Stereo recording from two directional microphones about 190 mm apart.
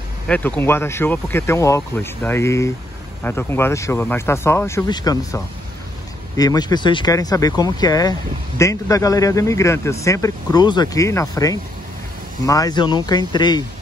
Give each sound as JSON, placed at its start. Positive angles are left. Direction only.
{"t": 0.3, "sound": "speech", "side_deg": 10}